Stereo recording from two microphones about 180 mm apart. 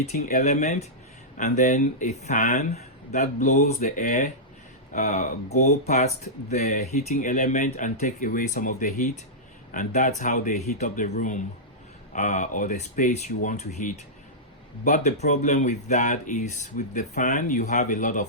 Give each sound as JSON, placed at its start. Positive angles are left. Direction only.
{"t": 0.2, "sound": "speech", "side_deg": 40}